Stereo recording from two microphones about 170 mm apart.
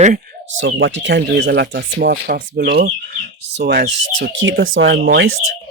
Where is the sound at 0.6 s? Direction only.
90° right.